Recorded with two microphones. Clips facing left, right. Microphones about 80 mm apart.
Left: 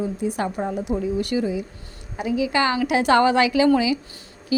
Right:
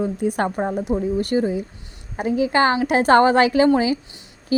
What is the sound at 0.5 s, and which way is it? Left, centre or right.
A woman's voice, right.